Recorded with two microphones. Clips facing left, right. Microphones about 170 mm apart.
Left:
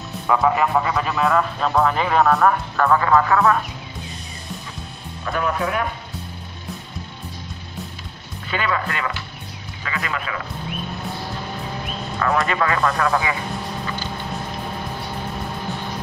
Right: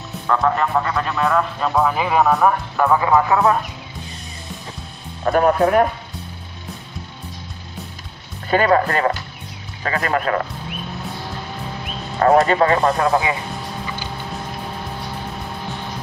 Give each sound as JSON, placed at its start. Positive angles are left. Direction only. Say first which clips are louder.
{"t": 0.3, "sound": "speech", "louder": "even", "side_deg": 5}
{"t": 2.7, "sound": "speech", "louder": "right 1 dB", "side_deg": -15}
{"t": 5.2, "sound": "speech", "louder": "right 8 dB", "side_deg": -45}
{"t": 8.5, "sound": "speech", "louder": "right 8 dB", "side_deg": -45}
{"t": 12.2, "sound": "speech", "louder": "right 7 dB", "side_deg": -35}